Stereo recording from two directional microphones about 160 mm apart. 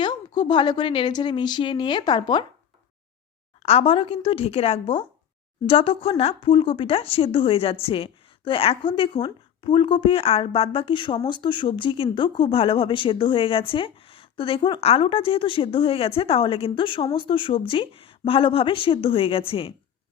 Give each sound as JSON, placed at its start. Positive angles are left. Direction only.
{"t": 0.0, "sound": "a woman's voice", "side_deg": 30}
{"t": 3.6, "sound": "speech", "side_deg": 40}